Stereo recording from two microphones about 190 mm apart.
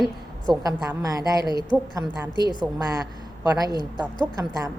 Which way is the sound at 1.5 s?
25° left (ahead or behind).